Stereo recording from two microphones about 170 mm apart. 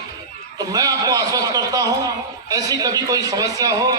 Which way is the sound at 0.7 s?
20° right (ahead or behind).